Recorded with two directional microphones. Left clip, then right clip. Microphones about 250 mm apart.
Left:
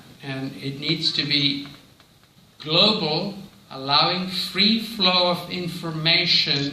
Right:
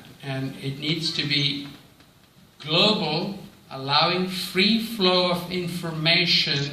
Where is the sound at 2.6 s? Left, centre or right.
Left.